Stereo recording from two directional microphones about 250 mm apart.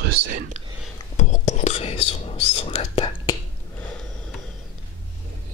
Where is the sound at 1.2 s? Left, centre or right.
Left.